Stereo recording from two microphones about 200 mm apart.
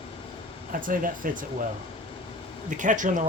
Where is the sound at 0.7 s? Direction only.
45° right (ahead or behind).